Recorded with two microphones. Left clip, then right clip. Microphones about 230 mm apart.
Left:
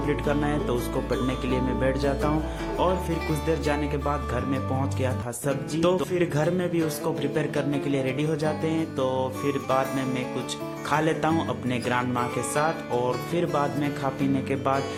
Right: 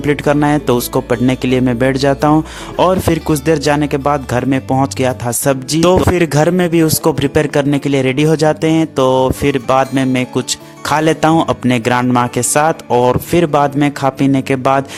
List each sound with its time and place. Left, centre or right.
0.1 s speech: right
3.4 s speech: right